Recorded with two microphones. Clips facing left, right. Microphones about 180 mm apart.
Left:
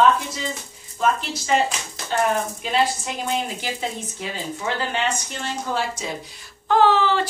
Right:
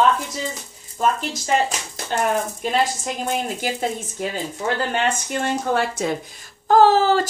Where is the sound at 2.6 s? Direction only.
45° right (ahead or behind).